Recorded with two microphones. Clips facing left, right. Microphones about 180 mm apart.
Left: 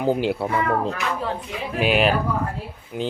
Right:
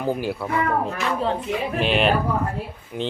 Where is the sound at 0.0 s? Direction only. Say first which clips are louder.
Left 3 dB; 20° left (ahead or behind).